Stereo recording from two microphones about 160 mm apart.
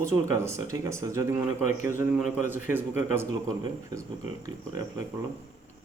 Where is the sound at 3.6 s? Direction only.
20° right (ahead or behind).